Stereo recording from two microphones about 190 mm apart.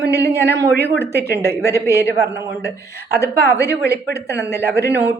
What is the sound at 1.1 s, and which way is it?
A man's voice, 60° right (ahead or behind).